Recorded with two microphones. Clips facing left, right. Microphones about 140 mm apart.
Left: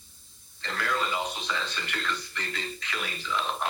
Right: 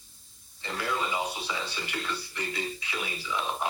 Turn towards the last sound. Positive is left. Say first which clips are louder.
# left 1 dB
turn(degrees=-10)  # may be behind; listen again after turning